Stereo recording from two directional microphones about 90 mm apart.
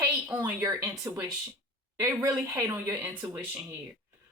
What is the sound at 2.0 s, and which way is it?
Speech, 35° right (ahead or behind).